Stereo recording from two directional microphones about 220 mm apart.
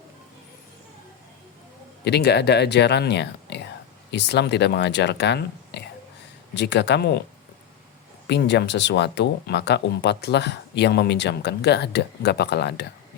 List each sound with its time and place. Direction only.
2.0 s speech: 50° left (ahead or behind)
8.3 s speech: 50° left (ahead or behind)